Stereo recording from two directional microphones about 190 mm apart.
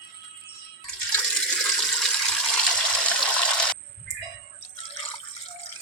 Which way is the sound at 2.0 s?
5° left (ahead or behind).